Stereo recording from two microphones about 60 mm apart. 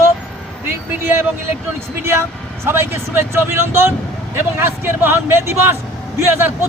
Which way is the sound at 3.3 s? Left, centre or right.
Right.